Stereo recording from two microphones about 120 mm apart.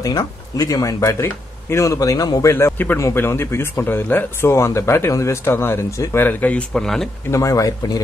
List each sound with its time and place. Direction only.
0.0 s speech: 30° left (ahead or behind)
2.5 s speech: 15° left (ahead or behind)
7.2 s speech: 25° left (ahead or behind)